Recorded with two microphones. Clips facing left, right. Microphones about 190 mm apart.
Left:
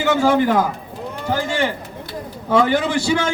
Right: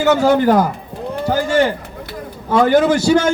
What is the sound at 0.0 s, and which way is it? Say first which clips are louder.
Speech: right 3 dB; 40° right (ahead or behind).